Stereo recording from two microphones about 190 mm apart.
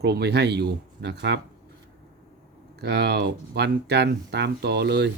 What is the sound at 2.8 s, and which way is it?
Speech, 60° right (ahead or behind).